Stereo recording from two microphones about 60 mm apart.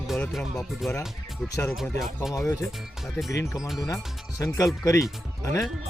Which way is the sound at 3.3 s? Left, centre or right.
Left.